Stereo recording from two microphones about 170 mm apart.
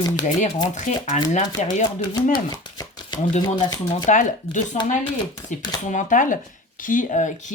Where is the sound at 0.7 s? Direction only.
45° left (ahead or behind).